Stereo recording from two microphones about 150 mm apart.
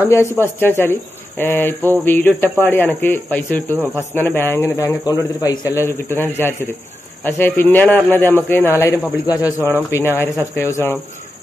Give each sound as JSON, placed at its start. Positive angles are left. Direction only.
{"t": 0.1, "sound": "a man's voice", "side_deg": 15}